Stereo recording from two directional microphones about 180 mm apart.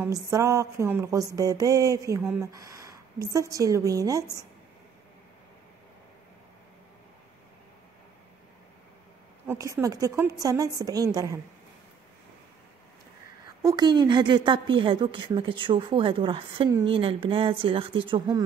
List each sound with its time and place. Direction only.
0.0 s music: 15° right (ahead or behind)
3.3 s a woman's voice: 20° right (ahead or behind)
9.5 s music: 15° right (ahead or behind)
10.8 s a woman's voice: 20° right (ahead or behind)
13.5 s a woman's voice: 20° right (ahead or behind)